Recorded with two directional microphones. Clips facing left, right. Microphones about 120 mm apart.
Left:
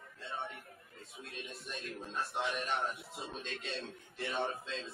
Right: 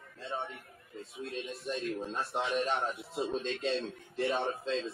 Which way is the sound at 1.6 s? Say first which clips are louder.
Right 11 dB; 30° right (ahead or behind).